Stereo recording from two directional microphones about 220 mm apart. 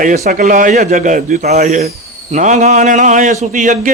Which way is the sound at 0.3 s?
35° right (ahead or behind).